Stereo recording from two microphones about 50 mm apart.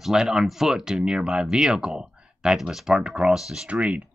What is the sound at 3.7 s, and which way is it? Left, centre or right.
Speech, right.